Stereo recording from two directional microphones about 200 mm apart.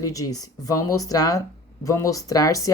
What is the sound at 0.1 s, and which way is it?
A woman's voice, 15° left (ahead or behind).